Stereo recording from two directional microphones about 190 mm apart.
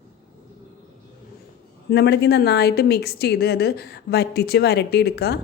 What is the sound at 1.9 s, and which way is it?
A woman's voice, 60° left (ahead or behind).